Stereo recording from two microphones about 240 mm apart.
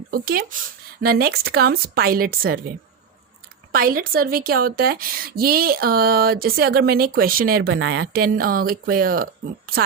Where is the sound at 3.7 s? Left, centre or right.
Right.